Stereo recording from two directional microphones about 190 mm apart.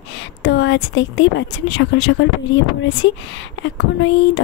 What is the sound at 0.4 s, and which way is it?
Speech, 70° left (ahead or behind).